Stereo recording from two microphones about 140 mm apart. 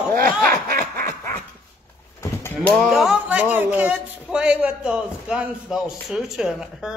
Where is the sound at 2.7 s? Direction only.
Centre (ahead or behind).